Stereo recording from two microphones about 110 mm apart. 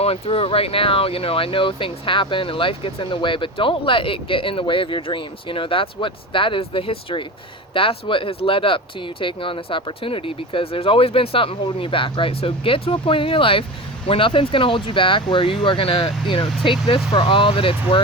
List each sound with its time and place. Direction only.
0.0 s speech: 60° left (ahead or behind)